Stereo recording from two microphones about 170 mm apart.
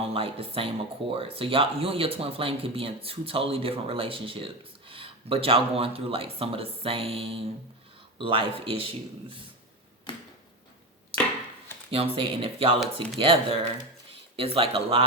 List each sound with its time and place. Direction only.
0.1 s speech: 35° right (ahead or behind)
10.1 s a sound: 30° left (ahead or behind)
11.9 s speech: 30° right (ahead or behind)